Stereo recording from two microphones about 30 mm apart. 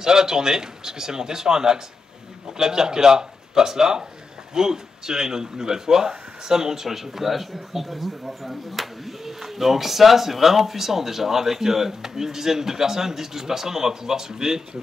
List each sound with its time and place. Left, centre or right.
0.0 s speech: centre